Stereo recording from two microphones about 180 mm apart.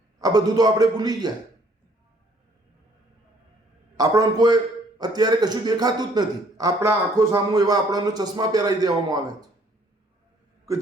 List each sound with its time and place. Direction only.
0.2 s a man's voice: 20° right (ahead or behind)
3.9 s a man's voice: 20° right (ahead or behind)